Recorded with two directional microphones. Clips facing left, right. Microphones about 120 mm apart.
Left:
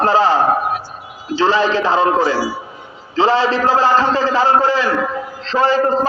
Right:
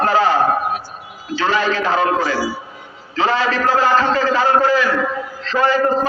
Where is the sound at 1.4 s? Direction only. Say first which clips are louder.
Left 3 dB; 30° left (ahead or behind).